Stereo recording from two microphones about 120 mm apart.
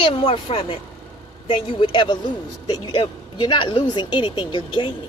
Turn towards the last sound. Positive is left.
turn(degrees=40)  # may be behind; listen again after turning